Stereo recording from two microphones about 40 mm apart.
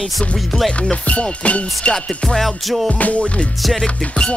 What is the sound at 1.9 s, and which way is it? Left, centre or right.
Music, centre.